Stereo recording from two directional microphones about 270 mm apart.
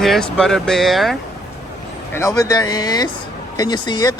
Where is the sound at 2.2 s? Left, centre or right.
Centre.